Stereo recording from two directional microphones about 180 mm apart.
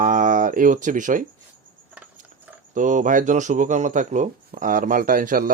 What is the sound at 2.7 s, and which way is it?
Speech, 45° right (ahead or behind).